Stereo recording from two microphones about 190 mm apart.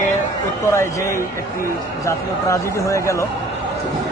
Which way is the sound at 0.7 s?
15° left (ahead or behind).